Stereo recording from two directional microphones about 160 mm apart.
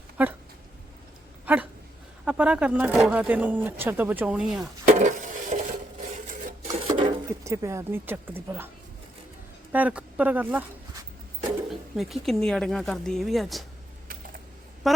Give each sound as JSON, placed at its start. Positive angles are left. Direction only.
{"t": 0.2, "sound": "speech", "side_deg": -10}
{"t": 1.5, "sound": "a sound", "side_deg": -10}
{"t": 2.2, "sound": "speech", "side_deg": -5}
{"t": 4.9, "sound": "wood", "side_deg": -50}
{"t": 6.2, "sound": "sewing machine", "side_deg": -50}
{"t": 6.8, "sound": "a sound", "side_deg": -30}
{"t": 7.3, "sound": "speech", "side_deg": -20}
{"t": 9.7, "sound": "speech", "side_deg": -10}
{"t": 11.7, "sound": "speech", "side_deg": 0}
{"t": 14.8, "sound": "speech", "side_deg": 0}